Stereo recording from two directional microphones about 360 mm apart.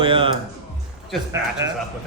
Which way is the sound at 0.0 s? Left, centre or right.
Centre.